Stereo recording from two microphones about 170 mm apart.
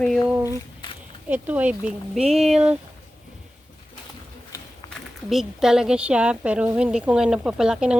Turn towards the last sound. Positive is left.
turn(degrees=-5)  # may be behind; listen again after turning